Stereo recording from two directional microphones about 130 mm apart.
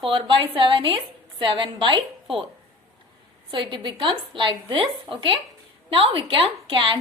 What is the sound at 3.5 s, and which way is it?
A woman's voice, 35° right (ahead or behind).